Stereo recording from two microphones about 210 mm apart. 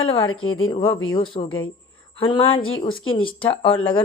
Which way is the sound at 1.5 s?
75° left (ahead or behind).